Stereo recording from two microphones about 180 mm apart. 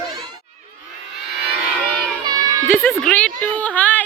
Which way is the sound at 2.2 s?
20° right (ahead or behind).